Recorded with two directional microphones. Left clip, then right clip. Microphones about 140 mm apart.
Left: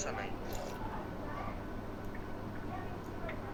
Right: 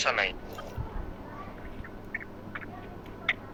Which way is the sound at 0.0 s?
90° right.